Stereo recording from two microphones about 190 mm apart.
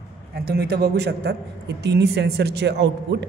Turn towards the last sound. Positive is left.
turn(degrees=-65)  # may be behind; listen again after turning